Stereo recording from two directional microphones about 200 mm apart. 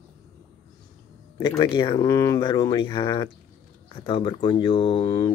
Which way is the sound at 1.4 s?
20° left (ahead or behind).